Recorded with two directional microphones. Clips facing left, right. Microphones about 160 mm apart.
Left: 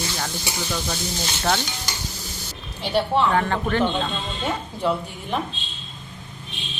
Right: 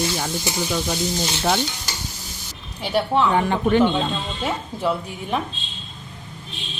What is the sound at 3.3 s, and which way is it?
Speech, 15° right (ahead or behind).